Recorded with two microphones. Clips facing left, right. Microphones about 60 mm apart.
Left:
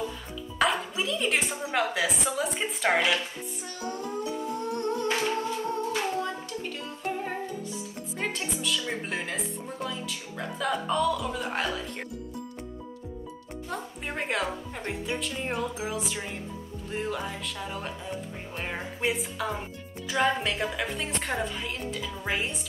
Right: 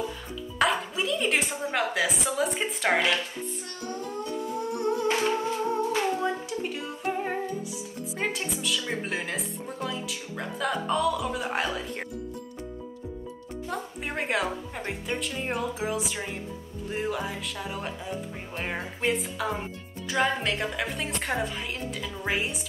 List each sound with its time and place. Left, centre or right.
0.6 s speech: centre
3.8 s music: centre
4.5 s music: centre
5.2 s humming: centre
6.1 s music: centre
8.2 s a woman's voice: centre
13.7 s a woman's voice: centre